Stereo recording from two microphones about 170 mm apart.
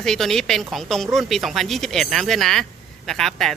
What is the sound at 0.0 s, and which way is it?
A woman's voice, 5° left (ahead or behind).